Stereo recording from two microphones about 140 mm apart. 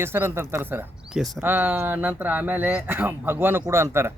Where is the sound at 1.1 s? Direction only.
Centre (ahead or behind).